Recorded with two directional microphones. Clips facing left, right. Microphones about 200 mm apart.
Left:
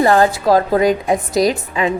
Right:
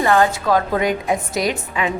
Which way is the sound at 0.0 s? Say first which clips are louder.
Left 4 dB; 35° left (ahead or behind).